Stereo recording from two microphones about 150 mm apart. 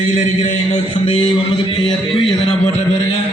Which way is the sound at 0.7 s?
40° left (ahead or behind).